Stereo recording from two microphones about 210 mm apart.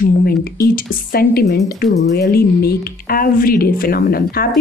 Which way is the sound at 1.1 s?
45° left (ahead or behind).